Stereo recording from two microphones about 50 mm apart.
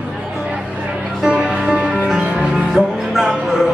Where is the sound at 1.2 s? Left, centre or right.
Centre.